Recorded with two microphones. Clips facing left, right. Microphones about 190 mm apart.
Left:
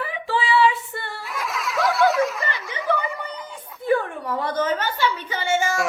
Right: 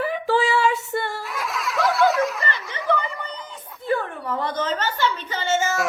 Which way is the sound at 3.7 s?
15° left (ahead or behind).